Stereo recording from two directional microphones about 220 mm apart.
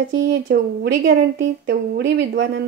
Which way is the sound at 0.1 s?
50° right (ahead or behind).